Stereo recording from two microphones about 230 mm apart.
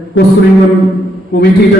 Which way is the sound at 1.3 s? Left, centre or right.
Left.